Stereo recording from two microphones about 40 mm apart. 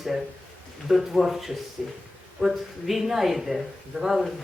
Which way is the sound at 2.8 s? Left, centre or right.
Centre.